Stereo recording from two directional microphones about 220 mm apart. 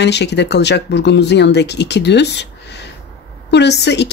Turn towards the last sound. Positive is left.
turn(degrees=50)  # may be behind; listen again after turning